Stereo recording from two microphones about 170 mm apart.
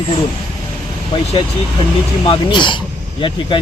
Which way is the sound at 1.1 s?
30° left (ahead or behind).